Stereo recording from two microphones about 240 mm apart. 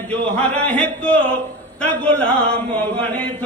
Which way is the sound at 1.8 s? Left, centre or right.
Centre.